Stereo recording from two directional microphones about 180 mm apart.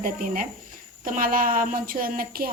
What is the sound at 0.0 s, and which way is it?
A woman's voice, 50° right (ahead or behind).